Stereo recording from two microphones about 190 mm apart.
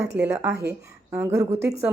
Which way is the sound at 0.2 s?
10° right (ahead or behind).